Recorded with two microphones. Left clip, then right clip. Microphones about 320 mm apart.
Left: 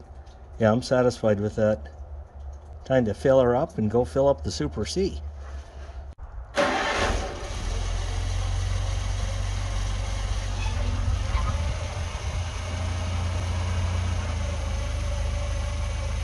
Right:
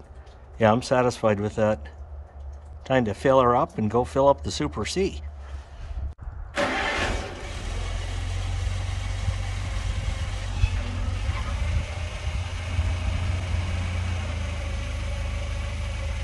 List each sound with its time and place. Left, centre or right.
0.6 s speech: centre
2.8 s speech: centre
6.5 s vehicle: centre